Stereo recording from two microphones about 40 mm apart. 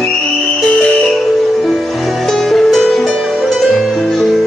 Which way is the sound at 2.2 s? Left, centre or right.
Centre.